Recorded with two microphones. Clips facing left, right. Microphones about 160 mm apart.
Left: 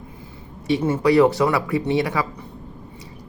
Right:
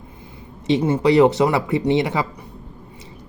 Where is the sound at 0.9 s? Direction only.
20° right (ahead or behind).